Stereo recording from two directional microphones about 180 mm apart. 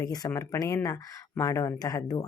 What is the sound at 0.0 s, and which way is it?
A woman's voice, 20° left (ahead or behind).